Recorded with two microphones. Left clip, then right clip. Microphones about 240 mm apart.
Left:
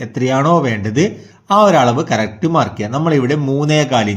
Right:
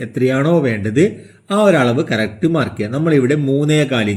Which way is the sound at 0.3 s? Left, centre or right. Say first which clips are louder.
Left 3 dB; left.